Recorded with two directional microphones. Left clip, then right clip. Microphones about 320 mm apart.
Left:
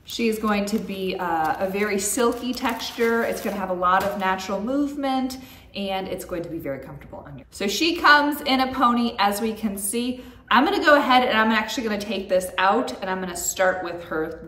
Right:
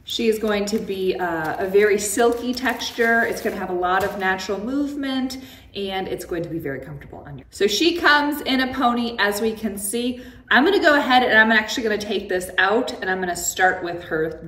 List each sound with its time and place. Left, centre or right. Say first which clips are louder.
0.1 s a woman's voice: right 3 dB; centre
7.5 s a woman's voice: right 4 dB; centre